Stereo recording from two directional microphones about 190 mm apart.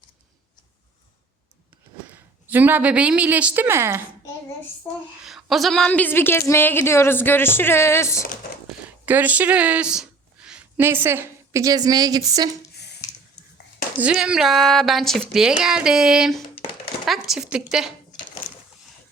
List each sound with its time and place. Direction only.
2.0 s a woman's voice: 10° right (ahead or behind)
5.2 s a woman's voice: centre (ahead or behind); by 8.3 s 15° left (ahead or behind)
8.6 s speech: 10° right (ahead or behind)
12.7 s a sound: 60° left (ahead or behind)
14.0 s speech: 5° right (ahead or behind)